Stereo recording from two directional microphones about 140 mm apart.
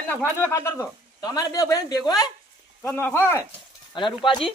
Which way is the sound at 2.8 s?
10° left (ahead or behind).